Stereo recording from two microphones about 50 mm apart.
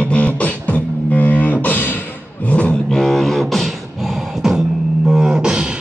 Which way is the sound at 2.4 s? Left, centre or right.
Left.